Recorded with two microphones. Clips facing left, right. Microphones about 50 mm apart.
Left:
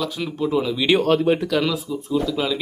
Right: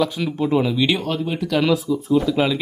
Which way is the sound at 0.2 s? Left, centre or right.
Centre.